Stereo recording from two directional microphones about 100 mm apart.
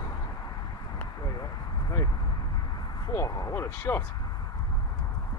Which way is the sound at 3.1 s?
30° left (ahead or behind).